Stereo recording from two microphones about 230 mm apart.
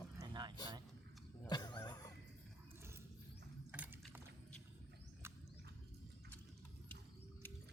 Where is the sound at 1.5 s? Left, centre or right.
Centre.